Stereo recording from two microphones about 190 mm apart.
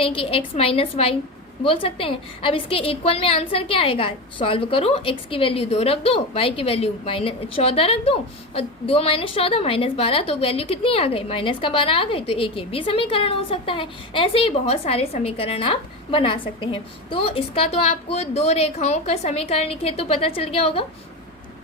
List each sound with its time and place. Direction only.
0.0 s a woman's voice: 30° left (ahead or behind)